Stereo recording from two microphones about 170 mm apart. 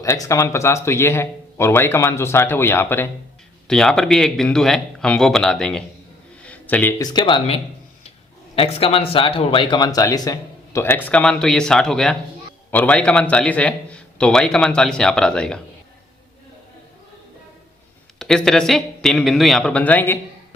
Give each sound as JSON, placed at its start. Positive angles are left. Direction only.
{"t": 0.0, "sound": "a man's voice", "side_deg": 20}
{"t": 6.4, "sound": "a sound", "side_deg": 10}
{"t": 7.0, "sound": "a man's voice", "side_deg": 25}
{"t": 18.2, "sound": "a man's voice", "side_deg": 5}